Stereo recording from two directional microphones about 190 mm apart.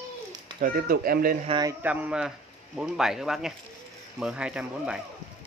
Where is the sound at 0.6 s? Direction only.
45° right (ahead or behind).